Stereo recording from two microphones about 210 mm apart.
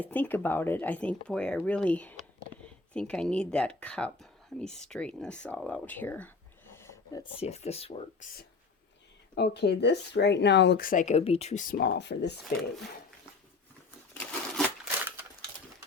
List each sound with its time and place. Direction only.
0.0 s speech: 10° left (ahead or behind); by 8.3 s 30° left (ahead or behind)
9.3 s speech: 50° left (ahead or behind); by 11.6 s 30° left (ahead or behind)
11.7 s speech: 55° left (ahead or behind)
14.1 s a sound: 5° left (ahead or behind)